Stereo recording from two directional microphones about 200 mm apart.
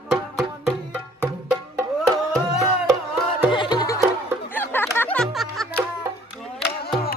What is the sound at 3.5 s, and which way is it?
Music, 20° left (ahead or behind).